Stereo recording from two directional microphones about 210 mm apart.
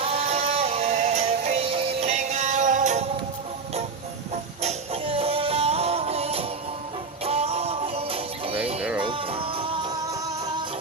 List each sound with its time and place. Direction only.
0.0 s synthetic singing: 30° right (ahead or behind)
4.6 s music: 25° right (ahead or behind)
8.8 s music: 5° right (ahead or behind)
9.0 s music: 25° right (ahead or behind)